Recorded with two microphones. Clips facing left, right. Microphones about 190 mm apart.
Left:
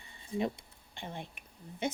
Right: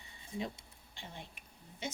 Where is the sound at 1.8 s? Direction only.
55° left (ahead or behind).